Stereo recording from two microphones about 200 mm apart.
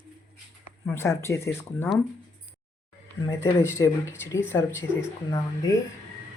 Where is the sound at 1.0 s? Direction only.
15° left (ahead or behind).